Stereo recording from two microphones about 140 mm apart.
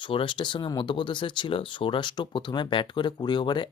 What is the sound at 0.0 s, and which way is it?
Speech, 40° left (ahead or behind).